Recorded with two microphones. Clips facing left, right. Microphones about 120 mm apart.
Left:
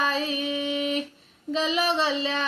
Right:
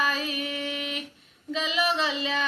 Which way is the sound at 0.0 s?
30° left (ahead or behind).